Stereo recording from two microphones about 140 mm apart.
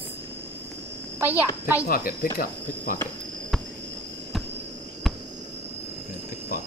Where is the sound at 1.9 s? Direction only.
90° left.